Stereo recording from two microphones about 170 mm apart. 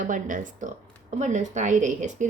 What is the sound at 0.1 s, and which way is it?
A woman's voice, 50° right (ahead or behind).